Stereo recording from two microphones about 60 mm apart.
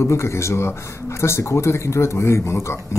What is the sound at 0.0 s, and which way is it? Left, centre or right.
Speech, left.